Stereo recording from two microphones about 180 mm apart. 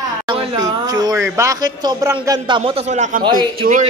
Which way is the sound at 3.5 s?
55° right (ahead or behind).